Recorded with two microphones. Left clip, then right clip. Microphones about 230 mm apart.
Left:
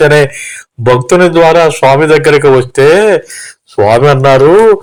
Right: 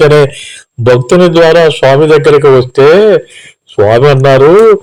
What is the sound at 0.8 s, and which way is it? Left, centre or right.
Speech, left.